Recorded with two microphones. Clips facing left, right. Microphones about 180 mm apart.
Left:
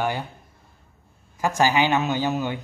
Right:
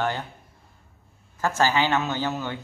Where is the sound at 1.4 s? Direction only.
15° left (ahead or behind).